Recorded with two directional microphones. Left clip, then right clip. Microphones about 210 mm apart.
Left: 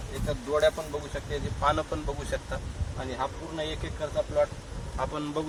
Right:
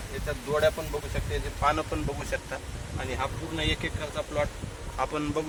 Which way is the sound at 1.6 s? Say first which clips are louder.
Even; 10° right (ahead or behind).